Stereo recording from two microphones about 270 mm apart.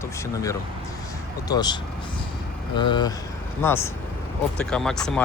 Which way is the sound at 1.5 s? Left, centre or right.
Centre.